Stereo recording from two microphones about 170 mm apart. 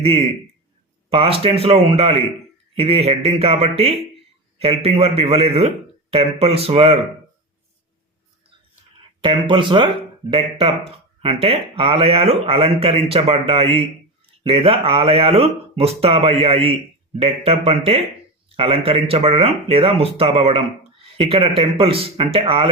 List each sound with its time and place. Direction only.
0.0 s speech: 35° right (ahead or behind)
9.2 s speech: 30° right (ahead or behind)